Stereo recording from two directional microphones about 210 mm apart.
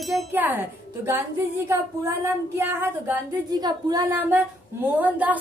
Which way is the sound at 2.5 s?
10° right (ahead or behind).